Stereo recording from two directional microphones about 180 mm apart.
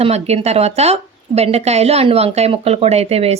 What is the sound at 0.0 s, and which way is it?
Speech, 35° right (ahead or behind).